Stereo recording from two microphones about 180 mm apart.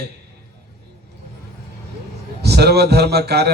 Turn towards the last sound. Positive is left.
turn(degrees=-65)  # may be behind; listen again after turning